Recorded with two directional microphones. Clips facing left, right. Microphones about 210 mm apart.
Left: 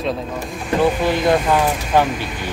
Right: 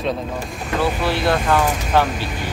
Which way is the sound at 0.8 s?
15° left (ahead or behind).